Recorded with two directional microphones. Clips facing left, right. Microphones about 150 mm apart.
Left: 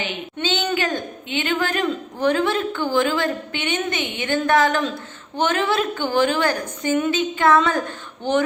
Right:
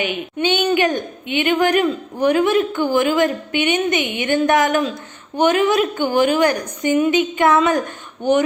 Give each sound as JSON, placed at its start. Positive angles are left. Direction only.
{"t": 0.0, "sound": "a woman's voice", "side_deg": -15}